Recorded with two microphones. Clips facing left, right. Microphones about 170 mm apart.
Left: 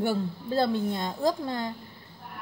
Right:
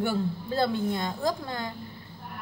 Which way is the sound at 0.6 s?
30° left (ahead or behind).